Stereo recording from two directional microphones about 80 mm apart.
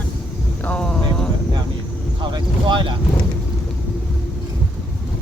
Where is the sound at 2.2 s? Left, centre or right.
Right.